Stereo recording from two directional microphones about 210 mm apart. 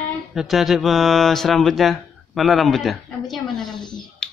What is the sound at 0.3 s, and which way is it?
Speech, centre (ahead or behind).